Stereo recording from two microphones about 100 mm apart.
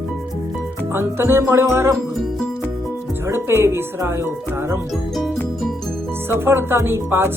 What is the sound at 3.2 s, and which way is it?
Speech, 25° right (ahead or behind).